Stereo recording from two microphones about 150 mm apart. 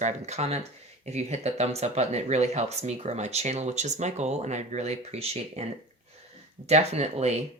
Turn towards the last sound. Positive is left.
turn(degrees=-45)  # may be behind; listen again after turning